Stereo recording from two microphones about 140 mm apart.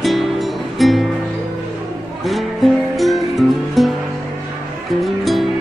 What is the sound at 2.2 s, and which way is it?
Music, centre (ahead or behind).